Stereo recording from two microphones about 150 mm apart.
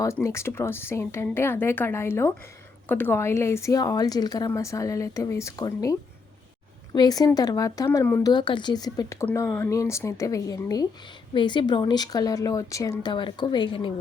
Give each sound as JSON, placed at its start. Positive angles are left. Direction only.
{"t": 0.0, "sound": "a woman's voice", "side_deg": 20}
{"t": 8.3, "sound": "a woman's voice", "side_deg": 30}